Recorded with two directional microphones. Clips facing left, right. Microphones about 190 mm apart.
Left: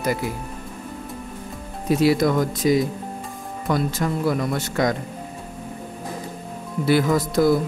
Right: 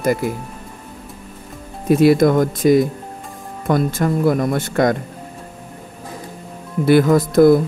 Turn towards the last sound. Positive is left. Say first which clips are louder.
# right 7 dB
turn(degrees=-55)  # may be behind; listen again after turning